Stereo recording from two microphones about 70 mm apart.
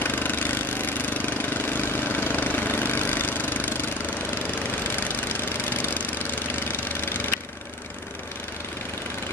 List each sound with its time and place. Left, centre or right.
0.0 s engine: left